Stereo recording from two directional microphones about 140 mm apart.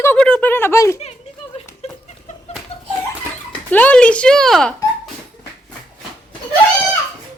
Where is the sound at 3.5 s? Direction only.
10° left (ahead or behind).